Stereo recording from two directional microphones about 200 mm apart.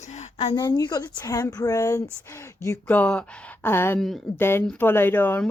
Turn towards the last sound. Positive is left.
turn(degrees=10)  # may be behind; listen again after turning